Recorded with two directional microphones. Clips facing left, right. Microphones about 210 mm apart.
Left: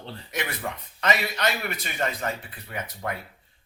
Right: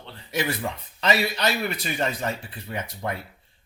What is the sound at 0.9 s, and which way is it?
Speech, 30° right (ahead or behind).